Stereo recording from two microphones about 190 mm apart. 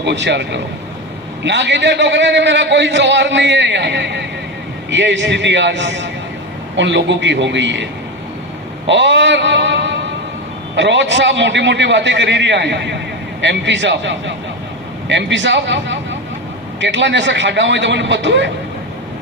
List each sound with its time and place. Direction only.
0.0 s a man's voice: 65° right (ahead or behind)
8.9 s a sound: 70° right (ahead or behind)
10.8 s a man's voice: 70° right (ahead or behind)